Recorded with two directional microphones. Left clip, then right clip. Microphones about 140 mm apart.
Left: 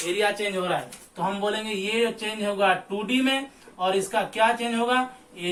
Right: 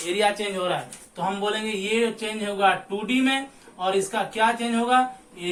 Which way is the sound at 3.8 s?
15° right (ahead or behind).